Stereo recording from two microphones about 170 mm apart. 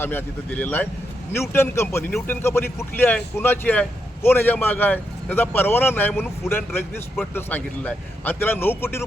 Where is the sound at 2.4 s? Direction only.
15° left (ahead or behind).